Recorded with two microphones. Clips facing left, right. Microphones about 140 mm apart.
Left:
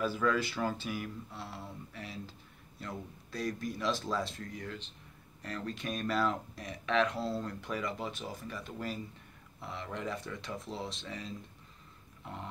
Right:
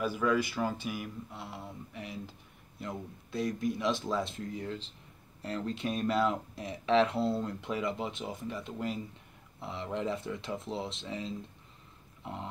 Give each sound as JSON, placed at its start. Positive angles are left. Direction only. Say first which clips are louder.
{"t": 0.0, "sound": "speech", "louder": "right 2 dB", "side_deg": -15}